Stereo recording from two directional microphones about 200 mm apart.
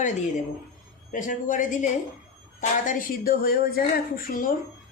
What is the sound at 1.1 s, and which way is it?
A man's voice, 40° left (ahead or behind).